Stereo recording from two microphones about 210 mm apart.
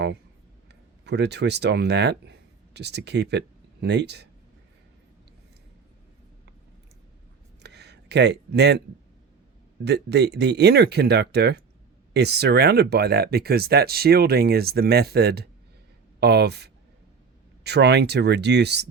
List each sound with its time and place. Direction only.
1.0 s speech: 55° right (ahead or behind)
7.6 s a sound: 55° right (ahead or behind)
9.8 s speech: 50° right (ahead or behind)